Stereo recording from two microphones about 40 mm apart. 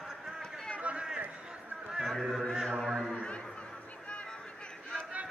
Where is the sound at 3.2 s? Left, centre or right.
Left.